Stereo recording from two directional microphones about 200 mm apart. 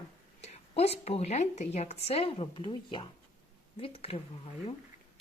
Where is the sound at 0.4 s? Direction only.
30° left (ahead or behind).